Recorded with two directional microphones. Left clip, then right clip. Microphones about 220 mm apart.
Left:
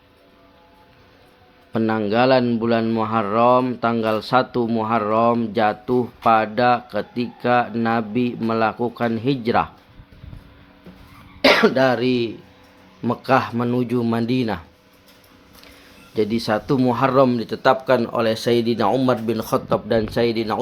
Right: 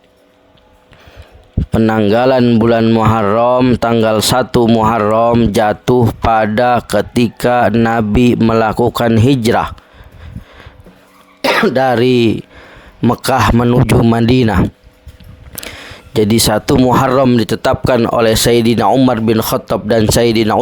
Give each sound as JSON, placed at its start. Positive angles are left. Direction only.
{"t": 1.7, "sound": "speech", "side_deg": -55}
{"t": 11.4, "sound": "speech", "side_deg": -50}
{"t": 15.6, "sound": "speech", "side_deg": -55}